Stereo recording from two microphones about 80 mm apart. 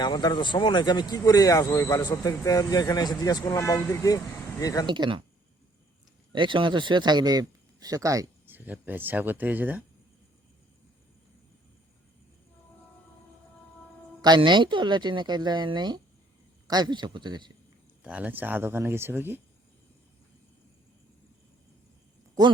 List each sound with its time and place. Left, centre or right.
0.0 s speech: left
4.6 s speech: left
4.9 s speech: right
6.3 s speech: right
8.4 s a sound: right
8.9 s speech: right
14.2 s a woman's voice: right
16.6 s a woman's voice: right
18.0 s speech: centre